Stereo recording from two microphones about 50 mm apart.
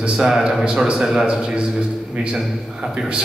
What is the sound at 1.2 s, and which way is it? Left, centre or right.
Speech, centre.